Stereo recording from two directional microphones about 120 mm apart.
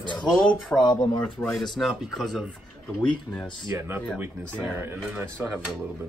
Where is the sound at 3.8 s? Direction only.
20° right (ahead or behind).